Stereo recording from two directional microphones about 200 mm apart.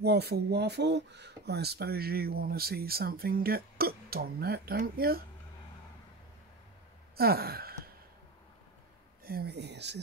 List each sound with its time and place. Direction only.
0.0 s speech: 55° right (ahead or behind)
7.2 s speech: 50° right (ahead or behind)
9.2 s speech: 50° right (ahead or behind)